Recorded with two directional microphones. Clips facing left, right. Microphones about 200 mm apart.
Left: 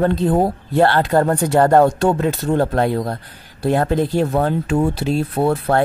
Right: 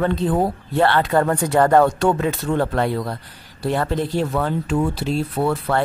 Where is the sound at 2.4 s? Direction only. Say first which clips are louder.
Left 4 dB; 40° left (ahead or behind).